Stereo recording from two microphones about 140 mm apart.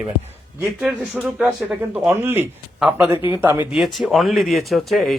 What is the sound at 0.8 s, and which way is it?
Speech, 10° right (ahead or behind).